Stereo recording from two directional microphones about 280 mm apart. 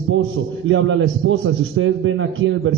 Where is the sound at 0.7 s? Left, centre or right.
Right.